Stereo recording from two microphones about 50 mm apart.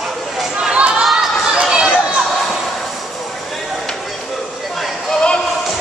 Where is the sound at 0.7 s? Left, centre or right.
Right.